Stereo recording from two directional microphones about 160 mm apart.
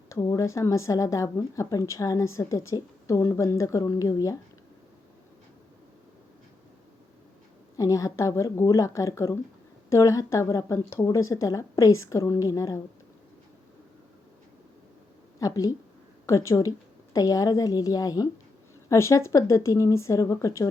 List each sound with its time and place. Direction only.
0.1 s speech: 20° left (ahead or behind)
7.8 s speech: 20° left (ahead or behind)
15.4 s speech: 20° left (ahead or behind)